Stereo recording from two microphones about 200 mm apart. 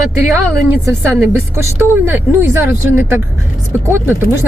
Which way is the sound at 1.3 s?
15° right (ahead or behind).